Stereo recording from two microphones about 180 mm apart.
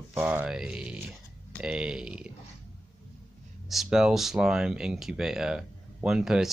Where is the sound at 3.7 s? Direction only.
Centre (ahead or behind).